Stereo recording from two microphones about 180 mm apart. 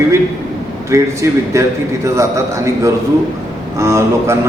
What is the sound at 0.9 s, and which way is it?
A man's voice, 15° right (ahead or behind).